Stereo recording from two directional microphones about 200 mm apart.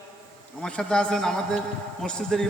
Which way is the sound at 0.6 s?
5° left (ahead or behind).